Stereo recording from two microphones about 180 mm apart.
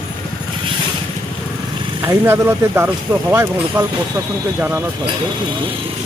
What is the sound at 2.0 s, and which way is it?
Speech, 15° right (ahead or behind).